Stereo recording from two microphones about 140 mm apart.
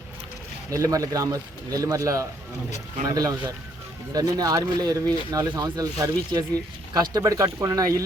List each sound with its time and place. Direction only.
0.7 s a man's voice: 25° right (ahead or behind)